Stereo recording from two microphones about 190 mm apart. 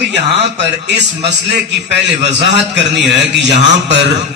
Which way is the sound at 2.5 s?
65° right (ahead or behind).